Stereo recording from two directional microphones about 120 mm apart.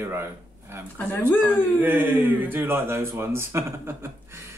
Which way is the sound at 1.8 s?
15° right (ahead or behind).